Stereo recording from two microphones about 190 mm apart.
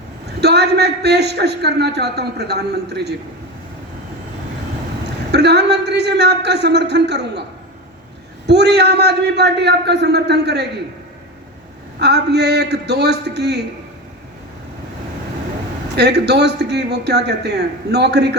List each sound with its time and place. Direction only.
0.4 s a man's voice: 60° right (ahead or behind)
5.3 s a man's voice: 60° right (ahead or behind)
8.4 s a man's voice: 60° right (ahead or behind)
11.9 s a man's voice: 60° right (ahead or behind)
16.0 s a man's voice: 60° right (ahead or behind)